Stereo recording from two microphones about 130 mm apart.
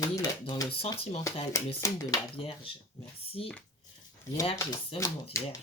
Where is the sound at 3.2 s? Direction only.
50° left (ahead or behind).